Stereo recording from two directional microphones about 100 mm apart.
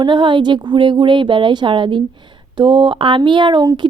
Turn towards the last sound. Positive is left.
turn(degrees=-50)  # may be behind; listen again after turning